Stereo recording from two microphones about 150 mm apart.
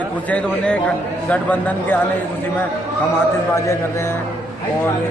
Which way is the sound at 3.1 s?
20° left (ahead or behind).